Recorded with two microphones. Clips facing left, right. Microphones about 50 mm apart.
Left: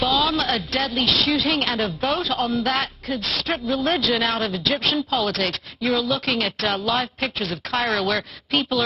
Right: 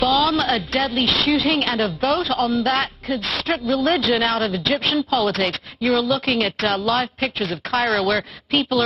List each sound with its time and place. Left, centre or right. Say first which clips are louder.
0.0 s a woman's voice: right 3 dB; centre
2.3 s a man's voice: right 3 dB; centre
2.6 s speech: right 3 dB; centre
3.6 s a woman's voice: right 3 dB; centre